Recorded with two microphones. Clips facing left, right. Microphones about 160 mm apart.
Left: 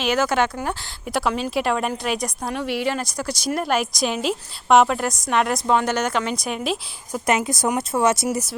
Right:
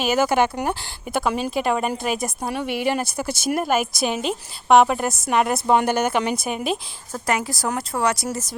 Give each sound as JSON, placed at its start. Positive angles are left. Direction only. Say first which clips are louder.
{"t": 0.0, "sound": "speech", "louder": "right 1 dB", "side_deg": -10}
{"t": 1.0, "sound": "speech", "louder": "even", "side_deg": 0}
{"t": 7.1, "sound": "speech", "louder": "left 3 dB", "side_deg": 20}